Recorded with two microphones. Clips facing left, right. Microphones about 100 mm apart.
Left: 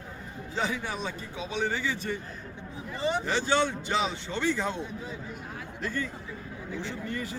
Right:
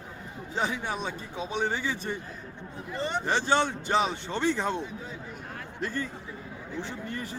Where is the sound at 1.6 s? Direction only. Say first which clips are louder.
Left 1 dB; 20° right (ahead or behind).